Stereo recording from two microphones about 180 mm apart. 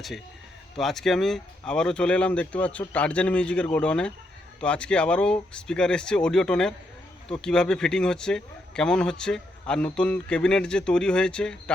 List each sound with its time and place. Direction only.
0.8 s a man's voice: centre (ahead or behind)